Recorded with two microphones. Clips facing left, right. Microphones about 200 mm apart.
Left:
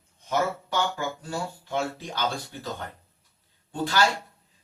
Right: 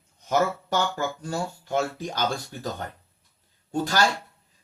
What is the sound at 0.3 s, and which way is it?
Speech, 45° right (ahead or behind).